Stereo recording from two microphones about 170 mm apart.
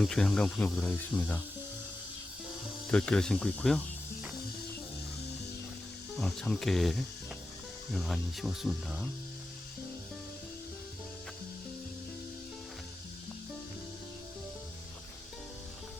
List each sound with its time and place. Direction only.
0.0 s speech: 5° left (ahead or behind)
2.9 s speech: 5° left (ahead or behind)
6.1 s speech: centre (ahead or behind)